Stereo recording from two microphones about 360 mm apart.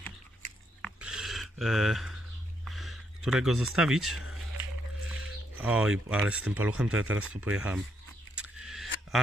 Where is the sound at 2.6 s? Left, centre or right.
Centre.